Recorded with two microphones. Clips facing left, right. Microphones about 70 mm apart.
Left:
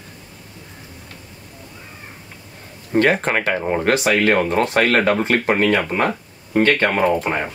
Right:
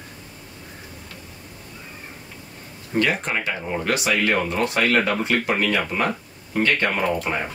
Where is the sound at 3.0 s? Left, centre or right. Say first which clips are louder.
Left 6 dB; left.